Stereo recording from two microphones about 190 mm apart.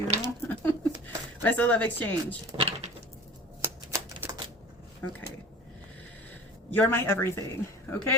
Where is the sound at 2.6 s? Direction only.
30° right (ahead or behind).